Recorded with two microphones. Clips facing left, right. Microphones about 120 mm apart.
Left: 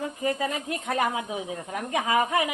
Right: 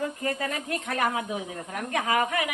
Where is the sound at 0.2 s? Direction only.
10° left (ahead or behind).